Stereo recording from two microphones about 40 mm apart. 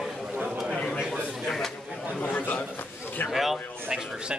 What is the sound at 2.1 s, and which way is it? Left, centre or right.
Speech, left.